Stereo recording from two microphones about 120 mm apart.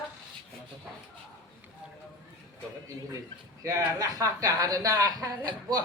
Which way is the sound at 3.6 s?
30° right (ahead or behind).